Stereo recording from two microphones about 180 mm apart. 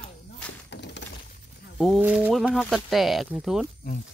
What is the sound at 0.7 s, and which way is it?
Glass, 75° left (ahead or behind).